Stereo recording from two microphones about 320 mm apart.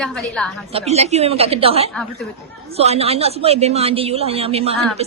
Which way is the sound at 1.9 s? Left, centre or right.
Centre.